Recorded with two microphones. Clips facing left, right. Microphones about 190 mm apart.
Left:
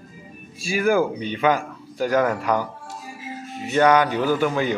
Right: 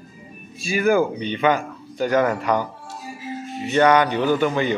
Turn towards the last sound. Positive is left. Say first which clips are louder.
# right 1 dB
turn(degrees=5)  # may be behind; listen again after turning